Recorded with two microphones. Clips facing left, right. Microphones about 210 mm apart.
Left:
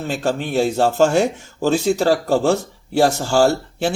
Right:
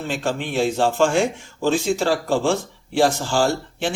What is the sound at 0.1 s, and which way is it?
A man's voice, 40° left (ahead or behind).